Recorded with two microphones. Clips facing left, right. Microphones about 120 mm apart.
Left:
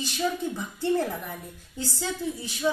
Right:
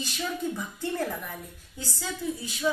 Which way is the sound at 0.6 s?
20° left (ahead or behind).